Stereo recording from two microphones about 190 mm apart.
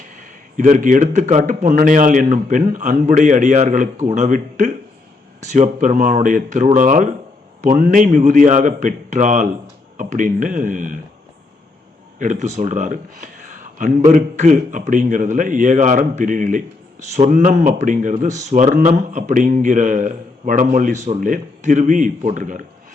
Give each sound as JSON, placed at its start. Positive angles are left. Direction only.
{"t": 0.2, "sound": "a man's voice", "side_deg": -45}
{"t": 12.2, "sound": "a man's voice", "side_deg": -40}